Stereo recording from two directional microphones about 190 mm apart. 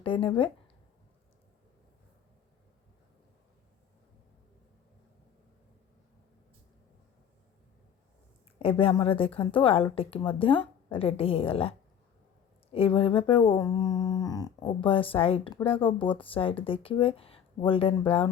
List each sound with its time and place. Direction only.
0.0 s speech: 25° left (ahead or behind)
8.5 s speech: 30° left (ahead or behind)
12.7 s speech: 30° left (ahead or behind)